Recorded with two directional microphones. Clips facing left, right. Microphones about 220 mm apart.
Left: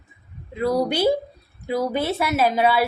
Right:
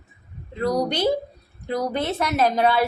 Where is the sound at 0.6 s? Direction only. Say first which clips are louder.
Left 2 dB; 5° left (ahead or behind).